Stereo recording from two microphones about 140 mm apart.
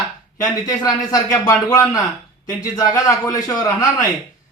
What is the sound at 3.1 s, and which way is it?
Speech, 25° left (ahead or behind).